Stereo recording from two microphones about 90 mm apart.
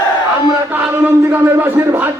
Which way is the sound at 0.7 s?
25° right (ahead or behind).